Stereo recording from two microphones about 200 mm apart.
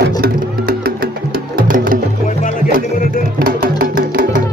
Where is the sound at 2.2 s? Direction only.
45° left (ahead or behind).